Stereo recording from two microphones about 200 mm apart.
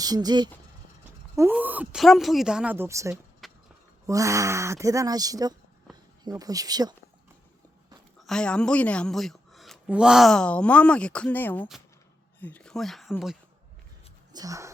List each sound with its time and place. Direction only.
0.0 s speech: 20° right (ahead or behind)
1.4 s speech: 10° right (ahead or behind)
3.4 s a sound: centre (ahead or behind)
4.0 s speech: 15° right (ahead or behind)
8.2 s a woman's voice: 5° left (ahead or behind)
14.3 s speech: 15° right (ahead or behind)